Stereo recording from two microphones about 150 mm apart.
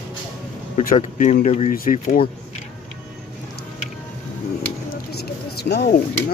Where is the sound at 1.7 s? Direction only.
70° left (ahead or behind).